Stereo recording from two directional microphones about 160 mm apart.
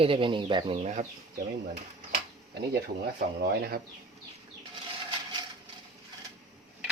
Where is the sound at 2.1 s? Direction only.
90° right.